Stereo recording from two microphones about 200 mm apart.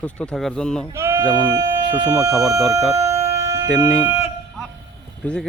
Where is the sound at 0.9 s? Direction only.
15° right (ahead or behind).